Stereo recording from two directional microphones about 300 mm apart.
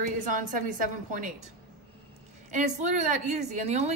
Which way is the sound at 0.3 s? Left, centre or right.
Right.